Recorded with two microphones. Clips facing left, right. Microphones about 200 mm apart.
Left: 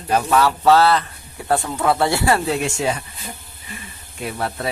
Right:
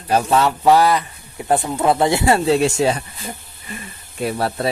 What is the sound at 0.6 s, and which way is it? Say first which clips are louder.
Speech: even; 15° right (ahead or behind).